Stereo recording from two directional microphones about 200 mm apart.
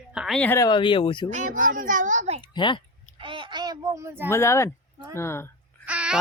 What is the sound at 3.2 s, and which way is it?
Child singing, 25° right (ahead or behind).